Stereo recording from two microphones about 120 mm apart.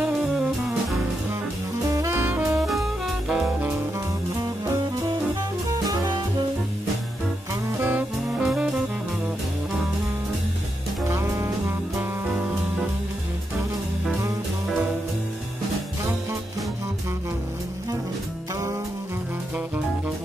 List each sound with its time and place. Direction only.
1.9 s saxophone: 25° right (ahead or behind)
2.5 s jazz: centre (ahead or behind)
7.8 s music: 15° right (ahead or behind)
8.5 s jazz: 5° right (ahead or behind)
11.1 s music: 20° right (ahead or behind)